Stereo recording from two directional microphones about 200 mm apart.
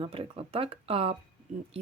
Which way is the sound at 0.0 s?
25° right (ahead or behind).